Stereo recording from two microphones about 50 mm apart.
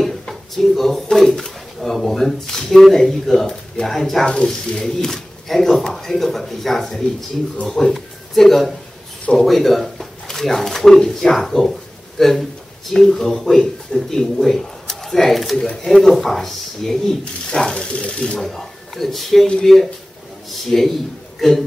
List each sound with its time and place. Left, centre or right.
0.3 s a sound: centre
1.1 s speech: centre
4.3 s speech: centre
17.2 s speech: left
18.4 s speech: centre
19.4 s speech: centre
20.7 s a man's voice: centre